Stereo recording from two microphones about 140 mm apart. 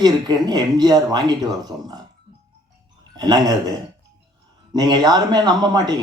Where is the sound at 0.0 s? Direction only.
30° right (ahead or behind).